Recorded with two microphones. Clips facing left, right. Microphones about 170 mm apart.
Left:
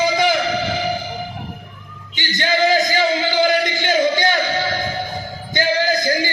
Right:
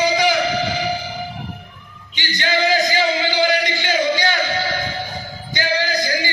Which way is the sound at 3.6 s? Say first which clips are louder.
Left 2 dB; 50° left (ahead or behind).